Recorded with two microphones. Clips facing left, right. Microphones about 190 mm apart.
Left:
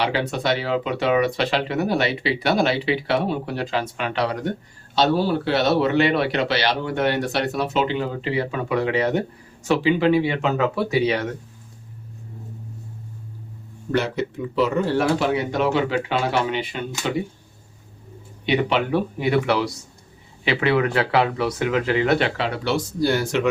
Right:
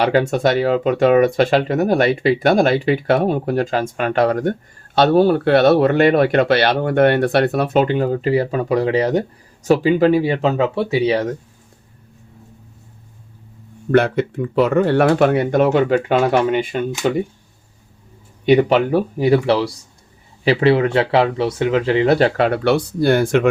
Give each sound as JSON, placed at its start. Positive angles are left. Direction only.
{"t": 0.0, "sound": "speech", "side_deg": -45}
{"t": 13.9, "sound": "speech", "side_deg": -55}
{"t": 18.4, "sound": "speech", "side_deg": -45}
{"t": 22.4, "sound": "speech", "side_deg": -55}